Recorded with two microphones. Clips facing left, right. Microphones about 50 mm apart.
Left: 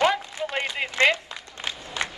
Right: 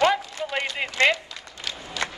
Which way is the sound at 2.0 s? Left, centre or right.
Left.